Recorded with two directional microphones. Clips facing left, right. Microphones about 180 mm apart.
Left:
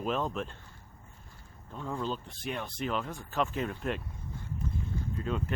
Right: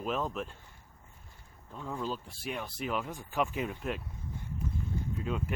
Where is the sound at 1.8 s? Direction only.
5° right (ahead or behind).